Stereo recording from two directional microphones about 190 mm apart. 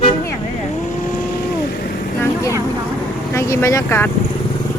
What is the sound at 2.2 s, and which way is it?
Speech, 15° left (ahead or behind).